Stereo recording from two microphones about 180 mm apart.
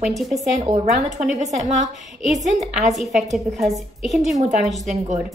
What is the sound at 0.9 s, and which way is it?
Speech, 40° right (ahead or behind).